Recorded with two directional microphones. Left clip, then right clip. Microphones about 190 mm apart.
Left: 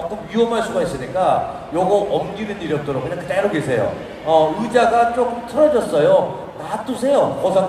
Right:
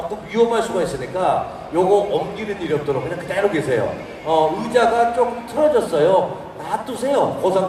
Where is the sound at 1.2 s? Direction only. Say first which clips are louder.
Left 2 dB; 20° right (ahead or behind).